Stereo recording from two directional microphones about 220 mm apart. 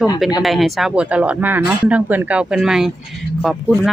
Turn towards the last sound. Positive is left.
turn(degrees=0)  # may be behind; listen again after turning